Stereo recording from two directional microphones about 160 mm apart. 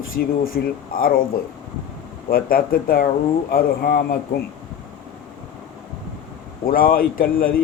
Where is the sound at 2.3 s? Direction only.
65° left (ahead or behind).